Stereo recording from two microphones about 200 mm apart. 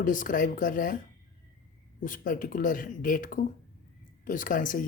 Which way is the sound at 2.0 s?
40° left (ahead or behind).